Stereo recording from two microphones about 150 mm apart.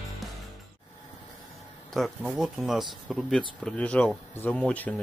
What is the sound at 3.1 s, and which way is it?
Speech, centre (ahead or behind).